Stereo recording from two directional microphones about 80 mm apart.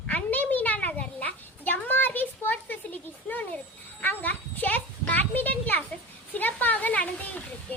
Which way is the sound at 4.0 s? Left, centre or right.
Left.